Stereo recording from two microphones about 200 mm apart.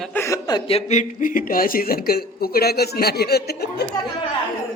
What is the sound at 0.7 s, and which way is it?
Speech, 35° left (ahead or behind).